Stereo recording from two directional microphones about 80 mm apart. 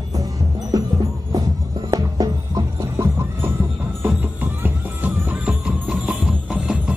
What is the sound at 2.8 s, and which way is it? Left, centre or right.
Music, right.